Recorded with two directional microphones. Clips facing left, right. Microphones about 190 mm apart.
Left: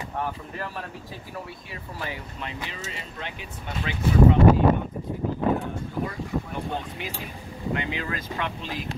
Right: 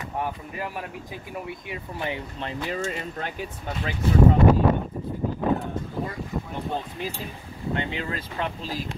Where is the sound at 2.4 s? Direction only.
45° right (ahead or behind).